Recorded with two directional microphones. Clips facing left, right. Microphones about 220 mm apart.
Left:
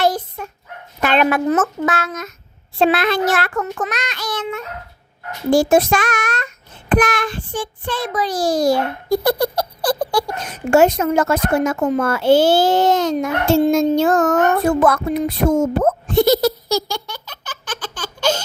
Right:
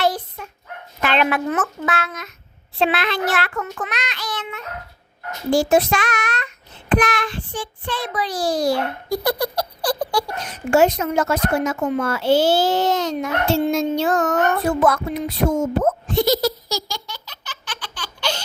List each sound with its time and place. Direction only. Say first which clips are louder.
0.0 s dog: left 3 dB; 45° left (ahead or behind)
1.0 s a child's voice: left 4 dB; 45° left (ahead or behind)